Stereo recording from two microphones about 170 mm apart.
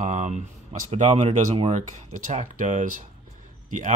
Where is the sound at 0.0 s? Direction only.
45° right (ahead or behind).